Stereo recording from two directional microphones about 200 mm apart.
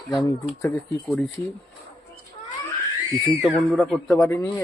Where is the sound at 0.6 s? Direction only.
5° left (ahead or behind).